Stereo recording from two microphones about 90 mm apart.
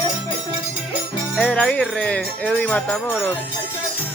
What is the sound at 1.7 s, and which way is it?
Speech, 10° left (ahead or behind).